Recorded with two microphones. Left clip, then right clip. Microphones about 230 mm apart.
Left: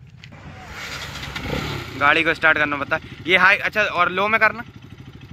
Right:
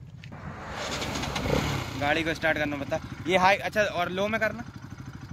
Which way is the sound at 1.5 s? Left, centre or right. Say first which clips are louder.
Left 2 dB; centre.